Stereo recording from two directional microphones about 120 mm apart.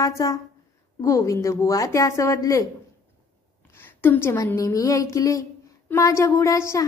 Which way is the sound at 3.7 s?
15° left (ahead or behind).